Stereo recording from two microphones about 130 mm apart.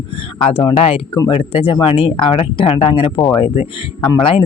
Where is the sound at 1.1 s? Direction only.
40° left (ahead or behind).